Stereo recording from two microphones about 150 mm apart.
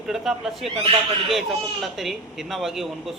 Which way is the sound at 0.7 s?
40° right (ahead or behind).